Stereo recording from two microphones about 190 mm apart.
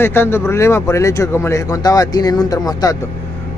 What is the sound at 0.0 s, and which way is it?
Speech, 10° left (ahead or behind).